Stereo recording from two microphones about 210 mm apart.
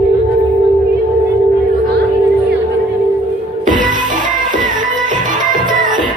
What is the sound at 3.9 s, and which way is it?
Music, 40° right (ahead or behind).